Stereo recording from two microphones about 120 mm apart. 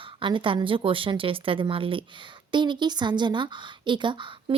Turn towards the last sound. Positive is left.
turn(degrees=-40)  # may be behind; listen again after turning